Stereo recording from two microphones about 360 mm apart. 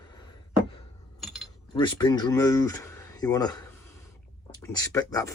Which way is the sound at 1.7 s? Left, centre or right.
Centre.